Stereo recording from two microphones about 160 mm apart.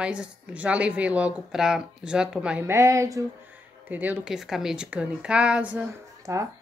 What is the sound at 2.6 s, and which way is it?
Speech, 20° right (ahead or behind).